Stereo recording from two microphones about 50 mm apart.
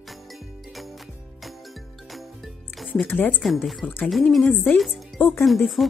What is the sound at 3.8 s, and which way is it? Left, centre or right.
Speech, centre.